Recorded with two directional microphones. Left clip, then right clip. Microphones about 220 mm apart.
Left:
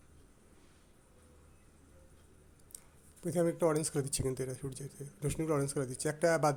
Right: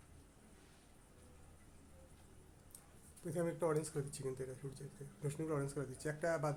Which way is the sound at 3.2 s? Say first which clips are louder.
Left 8 dB; 30° left (ahead or behind).